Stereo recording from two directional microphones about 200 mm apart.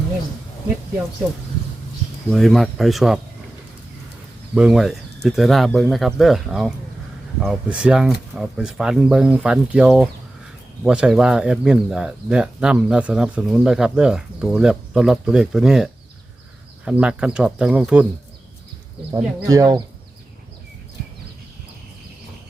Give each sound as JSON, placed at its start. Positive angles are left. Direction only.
{"t": 2.3, "sound": "speech", "side_deg": 0}
{"t": 4.5, "sound": "speech", "side_deg": -5}
{"t": 19.1, "sound": "speech", "side_deg": -15}